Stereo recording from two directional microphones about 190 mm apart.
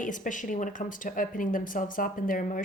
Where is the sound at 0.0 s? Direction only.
40° left (ahead or behind).